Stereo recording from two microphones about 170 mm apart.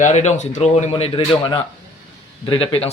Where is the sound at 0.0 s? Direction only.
45° left (ahead or behind).